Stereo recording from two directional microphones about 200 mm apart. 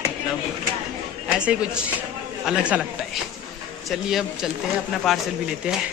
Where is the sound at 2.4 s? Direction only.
5° right (ahead or behind).